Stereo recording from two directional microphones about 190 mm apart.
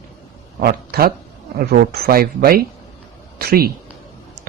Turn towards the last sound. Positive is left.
turn(degrees=-55)  # may be behind; listen again after turning